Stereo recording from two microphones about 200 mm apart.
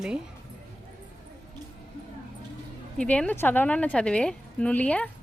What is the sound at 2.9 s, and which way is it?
A woman's voice, 5° left (ahead or behind).